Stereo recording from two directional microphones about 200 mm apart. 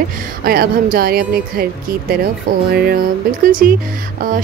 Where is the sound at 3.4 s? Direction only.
45° right (ahead or behind).